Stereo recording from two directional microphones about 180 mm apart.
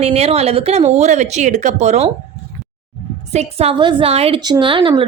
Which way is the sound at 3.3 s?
35° right (ahead or behind).